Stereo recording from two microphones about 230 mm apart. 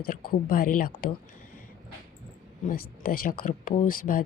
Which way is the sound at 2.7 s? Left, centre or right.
Left.